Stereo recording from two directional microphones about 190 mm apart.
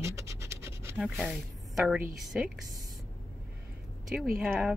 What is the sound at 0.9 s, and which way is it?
A woman's voice, centre (ahead or behind).